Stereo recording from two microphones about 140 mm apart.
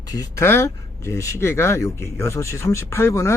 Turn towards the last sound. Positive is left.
turn(degrees=20)  # may be behind; listen again after turning